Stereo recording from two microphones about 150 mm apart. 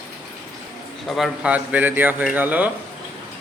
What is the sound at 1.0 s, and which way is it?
A man's voice, centre (ahead or behind).